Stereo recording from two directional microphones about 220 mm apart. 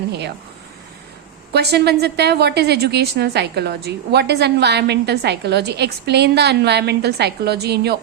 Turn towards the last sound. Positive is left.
turn(degrees=-45)  # may be behind; listen again after turning